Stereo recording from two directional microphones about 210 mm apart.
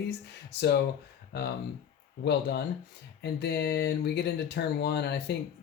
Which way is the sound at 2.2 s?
50° left (ahead or behind).